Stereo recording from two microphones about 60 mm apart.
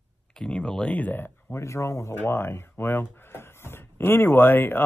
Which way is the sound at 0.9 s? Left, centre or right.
Left.